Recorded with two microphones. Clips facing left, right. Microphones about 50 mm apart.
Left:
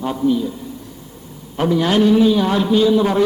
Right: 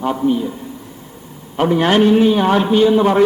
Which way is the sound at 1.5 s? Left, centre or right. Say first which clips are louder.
Right 2 dB; right.